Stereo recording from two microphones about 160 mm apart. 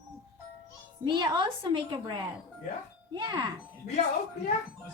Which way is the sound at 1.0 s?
30° right (ahead or behind).